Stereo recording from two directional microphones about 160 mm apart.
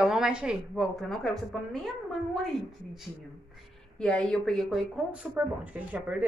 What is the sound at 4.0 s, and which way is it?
A woman's voice, 5° left (ahead or behind).